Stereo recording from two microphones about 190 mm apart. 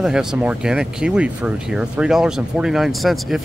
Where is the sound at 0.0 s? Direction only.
5° right (ahead or behind).